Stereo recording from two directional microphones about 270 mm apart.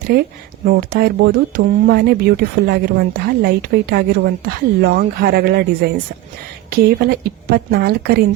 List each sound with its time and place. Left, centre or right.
0.1 s speech: right